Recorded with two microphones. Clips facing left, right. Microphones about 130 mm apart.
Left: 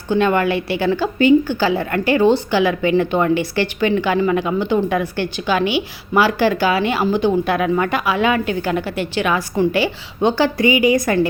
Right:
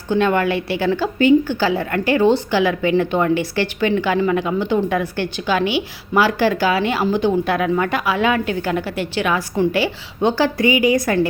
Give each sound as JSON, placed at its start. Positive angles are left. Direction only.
{"t": 0.1, "sound": "a woman's voice", "side_deg": 15}